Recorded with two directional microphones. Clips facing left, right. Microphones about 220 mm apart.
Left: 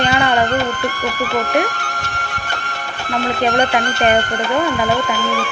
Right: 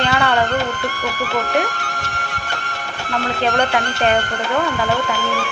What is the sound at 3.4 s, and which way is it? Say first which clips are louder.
Speech: left 2 dB; 15° left (ahead or behind).